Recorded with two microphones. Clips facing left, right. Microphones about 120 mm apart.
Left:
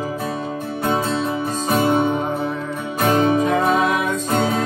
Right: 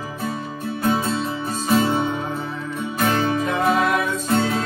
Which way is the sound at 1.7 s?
55° left (ahead or behind).